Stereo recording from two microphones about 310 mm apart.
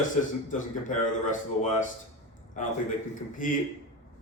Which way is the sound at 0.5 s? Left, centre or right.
Left.